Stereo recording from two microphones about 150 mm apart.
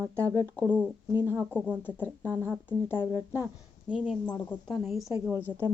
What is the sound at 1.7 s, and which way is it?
Speech, 10° right (ahead or behind).